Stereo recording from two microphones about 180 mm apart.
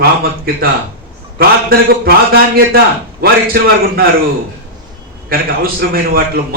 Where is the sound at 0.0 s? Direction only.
55° right (ahead or behind).